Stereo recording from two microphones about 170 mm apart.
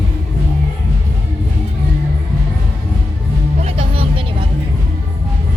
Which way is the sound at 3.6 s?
35° right (ahead or behind).